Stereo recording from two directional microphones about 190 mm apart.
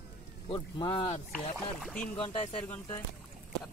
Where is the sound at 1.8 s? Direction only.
5° left (ahead or behind).